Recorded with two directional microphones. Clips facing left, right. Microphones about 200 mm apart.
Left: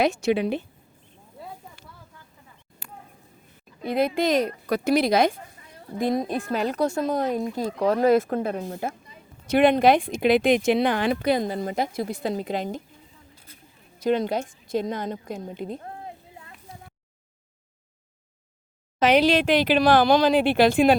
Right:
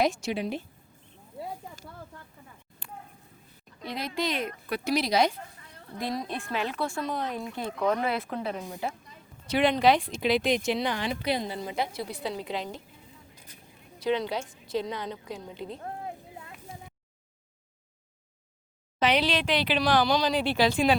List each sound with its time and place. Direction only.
0.0 s a woman's voice: 65° left (ahead or behind)
3.8 s speech: 55° left (ahead or behind)
4.7 s speech: 50° left (ahead or behind)
13.3 s a sound: 15° right (ahead or behind)
14.0 s speech: 45° left (ahead or behind)
18.9 s speech: 45° left (ahead or behind)